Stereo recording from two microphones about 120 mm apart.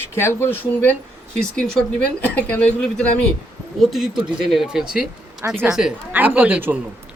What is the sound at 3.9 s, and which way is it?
Speech, 5° right (ahead or behind).